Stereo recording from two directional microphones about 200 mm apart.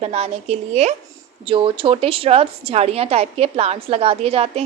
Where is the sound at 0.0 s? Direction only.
30° right (ahead or behind).